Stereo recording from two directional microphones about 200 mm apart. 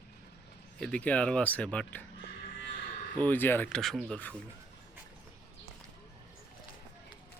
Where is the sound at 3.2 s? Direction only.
10° left (ahead or behind).